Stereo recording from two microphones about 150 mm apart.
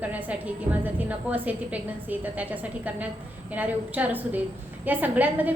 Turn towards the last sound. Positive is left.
turn(degrees=-10)  # may be behind; listen again after turning